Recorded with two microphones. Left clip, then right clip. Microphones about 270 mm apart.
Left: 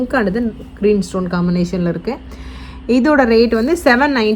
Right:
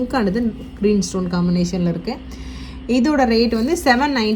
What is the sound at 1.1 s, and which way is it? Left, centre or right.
A woman's voice, centre.